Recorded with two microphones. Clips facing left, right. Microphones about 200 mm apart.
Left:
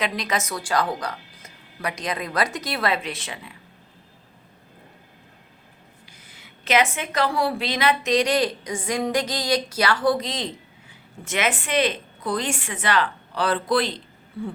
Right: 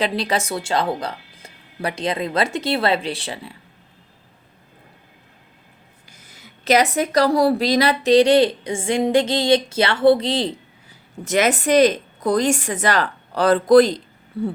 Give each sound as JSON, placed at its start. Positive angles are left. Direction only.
{"t": 0.0, "sound": "speech", "side_deg": -30}
{"t": 6.1, "sound": "a woman's voice", "side_deg": -45}